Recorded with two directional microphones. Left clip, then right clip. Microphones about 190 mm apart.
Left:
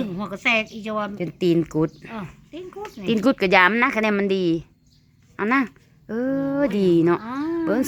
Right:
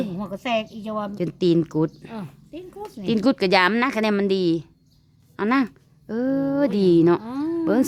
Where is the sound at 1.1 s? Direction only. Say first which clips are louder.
Right 2 dB; 25° right (ahead or behind).